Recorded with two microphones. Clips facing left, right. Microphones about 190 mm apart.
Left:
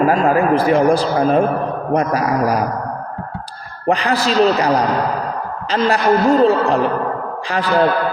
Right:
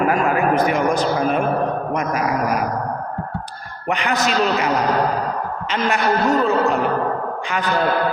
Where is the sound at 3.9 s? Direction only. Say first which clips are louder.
Left 4 dB; 35° left (ahead or behind).